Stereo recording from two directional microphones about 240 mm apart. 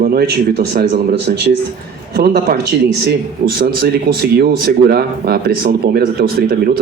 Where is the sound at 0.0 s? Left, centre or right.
Right.